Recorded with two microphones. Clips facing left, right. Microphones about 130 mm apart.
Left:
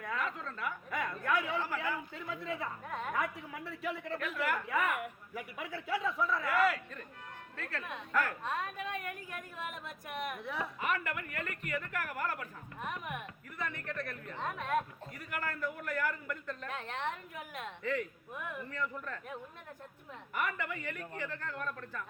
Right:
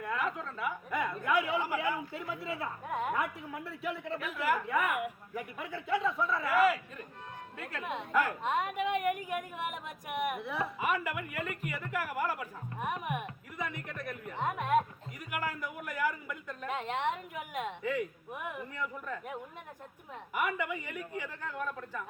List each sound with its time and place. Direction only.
0.0 s a woman's voice: 5° right (ahead or behind)
7.5 s a woman's voice: 15° right (ahead or behind)
10.3 s a woman's voice: centre (ahead or behind)